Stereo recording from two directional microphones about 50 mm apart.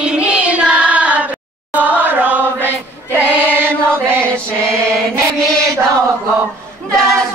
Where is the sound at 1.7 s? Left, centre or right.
Right.